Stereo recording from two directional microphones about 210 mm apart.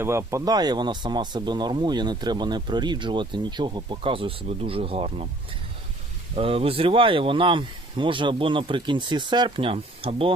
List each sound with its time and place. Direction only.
0.0 s speech: 15° right (ahead or behind)
6.3 s speech: 25° right (ahead or behind)